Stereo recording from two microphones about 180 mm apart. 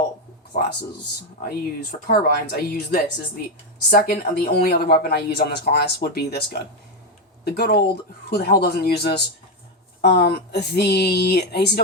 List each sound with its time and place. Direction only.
0.5 s speech: 50° left (ahead or behind)
2.0 s speech: 55° left (ahead or behind)